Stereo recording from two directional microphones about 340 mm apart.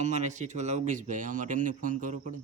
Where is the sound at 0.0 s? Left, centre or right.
Right.